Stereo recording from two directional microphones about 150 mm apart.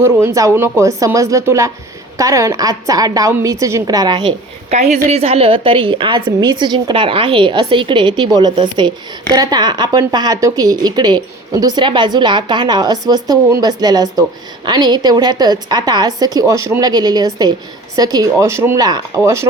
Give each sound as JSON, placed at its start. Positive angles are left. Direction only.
{"t": 0.0, "sound": "a woman's voice", "side_deg": -20}
{"t": 4.7, "sound": "a woman's voice", "side_deg": -50}